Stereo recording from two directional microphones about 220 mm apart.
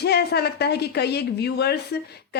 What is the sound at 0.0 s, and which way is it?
A woman's voice, 45° left (ahead or behind).